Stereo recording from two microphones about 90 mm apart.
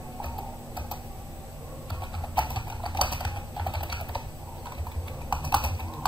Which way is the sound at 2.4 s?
60° left (ahead or behind).